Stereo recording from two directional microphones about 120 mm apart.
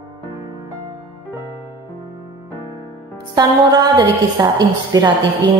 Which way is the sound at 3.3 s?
35° right (ahead or behind).